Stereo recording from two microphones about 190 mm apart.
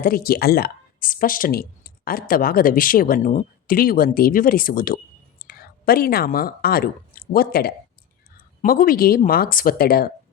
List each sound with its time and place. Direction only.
0.0 s a woman's voice: 50° left (ahead or behind)